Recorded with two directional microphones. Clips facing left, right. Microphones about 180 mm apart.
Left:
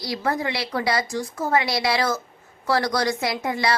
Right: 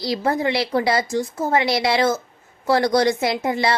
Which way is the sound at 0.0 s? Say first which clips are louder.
Right 4 dB; 25° right (ahead or behind).